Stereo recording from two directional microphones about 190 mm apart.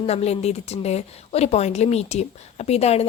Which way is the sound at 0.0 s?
35° left (ahead or behind).